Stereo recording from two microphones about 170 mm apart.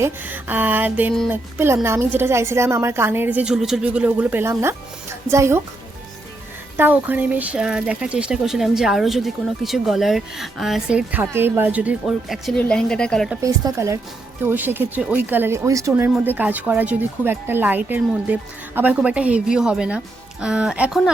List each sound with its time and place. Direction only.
0.0 s speech: 10° right (ahead or behind)
6.7 s speech: 10° right (ahead or behind)
13.4 s speech: 20° right (ahead or behind)